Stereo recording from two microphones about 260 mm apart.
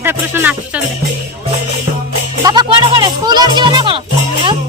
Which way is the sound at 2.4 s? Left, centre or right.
Centre.